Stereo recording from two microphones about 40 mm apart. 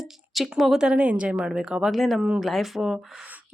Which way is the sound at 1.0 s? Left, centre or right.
Right.